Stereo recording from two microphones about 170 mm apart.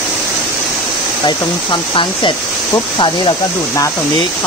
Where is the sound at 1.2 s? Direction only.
25° left (ahead or behind).